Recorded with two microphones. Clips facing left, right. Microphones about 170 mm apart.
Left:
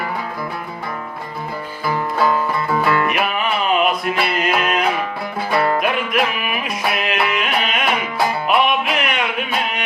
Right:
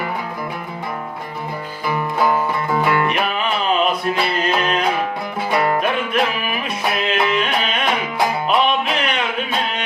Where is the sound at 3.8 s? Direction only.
30° right (ahead or behind).